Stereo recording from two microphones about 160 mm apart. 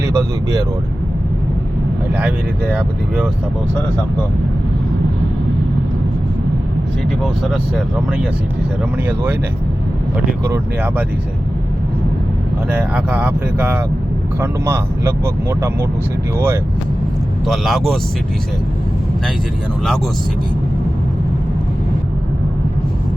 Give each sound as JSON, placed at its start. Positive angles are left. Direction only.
{"t": 0.0, "sound": "speech", "side_deg": -20}
{"t": 8.8, "sound": "speech", "side_deg": -10}
{"t": 10.4, "sound": "speech", "side_deg": -15}
{"t": 12.9, "sound": "speech", "side_deg": -10}
{"t": 17.4, "sound": "speech", "side_deg": 0}